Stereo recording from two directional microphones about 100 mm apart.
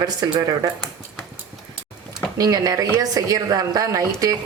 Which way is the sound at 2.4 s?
35° right (ahead or behind).